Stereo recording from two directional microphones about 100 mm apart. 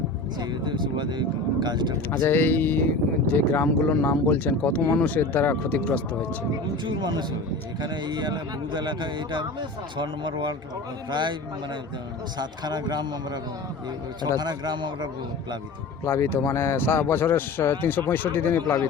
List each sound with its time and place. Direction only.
0.3 s a man's voice: 50° right (ahead or behind)
2.2 s a man's voice: 20° left (ahead or behind)
6.8 s a man's voice: 45° right (ahead or behind)
12.4 s a man's voice: 45° right (ahead or behind)
16.0 s a man's voice: 25° left (ahead or behind)